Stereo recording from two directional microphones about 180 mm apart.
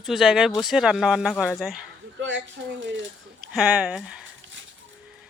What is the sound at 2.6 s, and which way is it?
Speech, 90° right.